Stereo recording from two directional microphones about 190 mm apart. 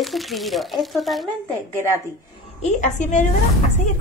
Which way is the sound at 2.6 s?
40° left (ahead or behind).